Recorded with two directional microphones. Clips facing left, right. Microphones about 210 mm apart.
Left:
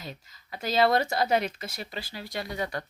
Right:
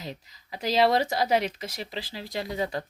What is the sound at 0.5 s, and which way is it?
Speech, 15° right (ahead or behind).